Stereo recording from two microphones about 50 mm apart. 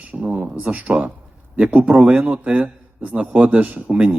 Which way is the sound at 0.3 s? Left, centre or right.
Right.